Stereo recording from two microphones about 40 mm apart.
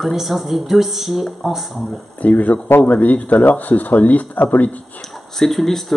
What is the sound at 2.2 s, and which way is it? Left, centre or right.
Speech, left.